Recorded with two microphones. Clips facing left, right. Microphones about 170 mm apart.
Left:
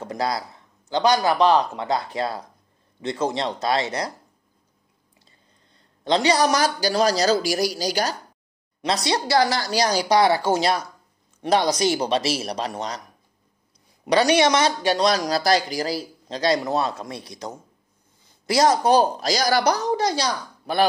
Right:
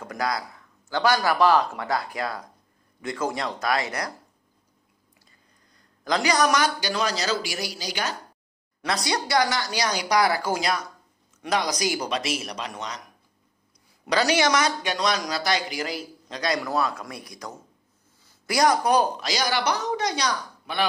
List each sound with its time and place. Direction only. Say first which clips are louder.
0.0 s speech: left 3 dB; 25° left (ahead or behind)
5.8 s speech: left 4 dB; 25° left (ahead or behind)
8.8 s speech: left 4 dB; 25° left (ahead or behind)
14.0 s speech: left 4 dB; 20° left (ahead or behind)